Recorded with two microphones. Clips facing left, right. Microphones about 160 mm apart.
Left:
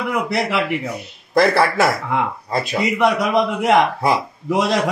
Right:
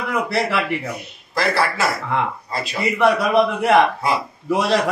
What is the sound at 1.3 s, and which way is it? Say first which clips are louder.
Speech: left 5 dB; 55° left (ahead or behind).